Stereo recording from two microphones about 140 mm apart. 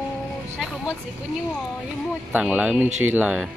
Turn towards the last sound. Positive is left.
turn(degrees=-10)  # may be behind; listen again after turning